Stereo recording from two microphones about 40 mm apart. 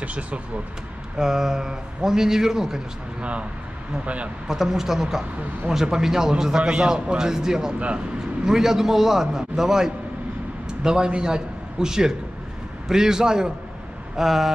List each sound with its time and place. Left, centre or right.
0.0 s speech: right
1.1 s a man's voice: centre
3.2 s speech: right
4.5 s a man's voice: centre
14.1 s speech: centre